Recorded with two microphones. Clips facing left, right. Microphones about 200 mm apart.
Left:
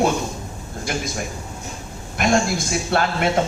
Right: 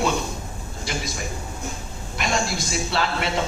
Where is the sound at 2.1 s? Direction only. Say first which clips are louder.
Left 7 dB; 50° left (ahead or behind).